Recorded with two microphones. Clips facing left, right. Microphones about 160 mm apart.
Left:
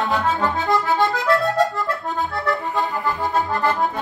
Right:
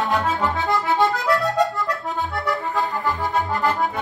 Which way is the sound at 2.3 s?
Centre (ahead or behind).